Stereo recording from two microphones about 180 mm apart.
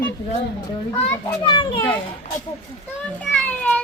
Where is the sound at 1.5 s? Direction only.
30° left (ahead or behind).